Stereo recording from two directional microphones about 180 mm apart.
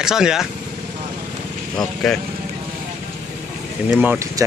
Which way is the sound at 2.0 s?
Centre (ahead or behind).